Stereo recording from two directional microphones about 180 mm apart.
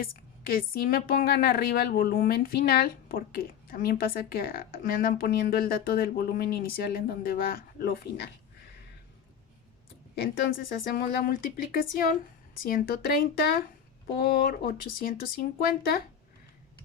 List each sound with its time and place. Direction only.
0.0 s a woman's voice: 55° left (ahead or behind)
10.5 s a woman's voice: 55° left (ahead or behind)